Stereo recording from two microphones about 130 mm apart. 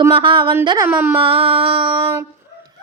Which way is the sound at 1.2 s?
45° right (ahead or behind).